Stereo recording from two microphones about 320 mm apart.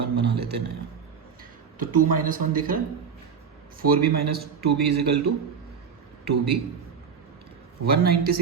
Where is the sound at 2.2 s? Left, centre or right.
Right.